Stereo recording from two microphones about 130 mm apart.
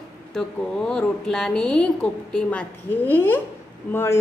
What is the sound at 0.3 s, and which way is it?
A woman's voice, 5° left (ahead or behind).